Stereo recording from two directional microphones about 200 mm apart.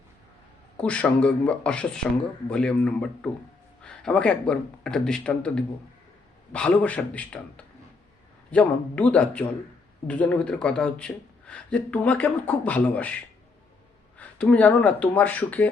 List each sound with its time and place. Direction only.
0.8 s speech: 5° left (ahead or behind)
14.2 s speech: 5° left (ahead or behind)